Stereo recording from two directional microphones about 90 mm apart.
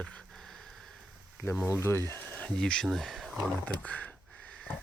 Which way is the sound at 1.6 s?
30° left (ahead or behind).